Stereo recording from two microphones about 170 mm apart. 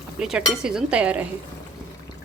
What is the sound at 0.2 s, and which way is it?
Chink, 5° right (ahead or behind).